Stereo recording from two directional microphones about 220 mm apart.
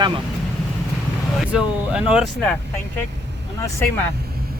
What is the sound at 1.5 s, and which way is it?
Speech, 5° right (ahead or behind).